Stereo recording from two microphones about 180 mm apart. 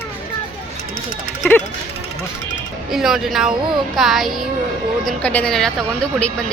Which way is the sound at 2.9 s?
Centre (ahead or behind).